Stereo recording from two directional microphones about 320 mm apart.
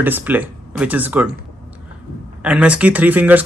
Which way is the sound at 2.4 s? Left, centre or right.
Centre.